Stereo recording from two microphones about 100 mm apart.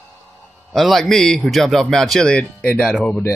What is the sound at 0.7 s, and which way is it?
Speech, centre (ahead or behind).